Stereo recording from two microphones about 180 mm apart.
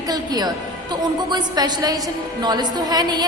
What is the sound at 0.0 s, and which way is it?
A woman's voice, 20° right (ahead or behind).